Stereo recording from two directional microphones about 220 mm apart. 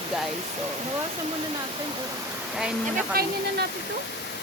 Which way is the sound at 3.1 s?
45° right (ahead or behind).